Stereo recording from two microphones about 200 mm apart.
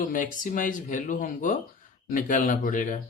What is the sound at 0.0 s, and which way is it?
Speech, 40° left (ahead or behind).